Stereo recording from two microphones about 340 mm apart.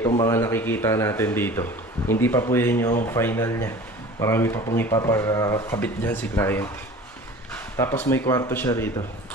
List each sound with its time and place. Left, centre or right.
0.1 s speech: centre